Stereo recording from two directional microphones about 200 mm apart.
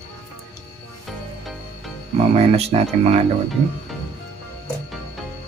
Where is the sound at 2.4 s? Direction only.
30° right (ahead or behind).